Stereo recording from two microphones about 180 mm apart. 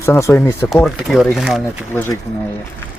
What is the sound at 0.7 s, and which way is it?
Speech, centre (ahead or behind).